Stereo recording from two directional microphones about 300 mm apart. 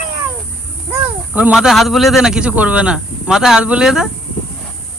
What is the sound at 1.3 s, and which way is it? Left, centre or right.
Speech, centre.